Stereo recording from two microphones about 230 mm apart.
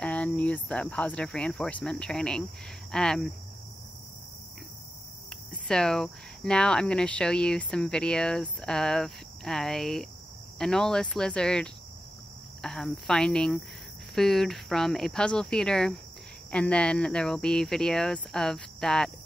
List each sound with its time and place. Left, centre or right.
0.0 s speech: centre
5.7 s speech: centre